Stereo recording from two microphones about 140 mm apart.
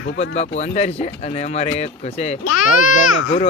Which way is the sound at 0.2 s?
55° left (ahead or behind).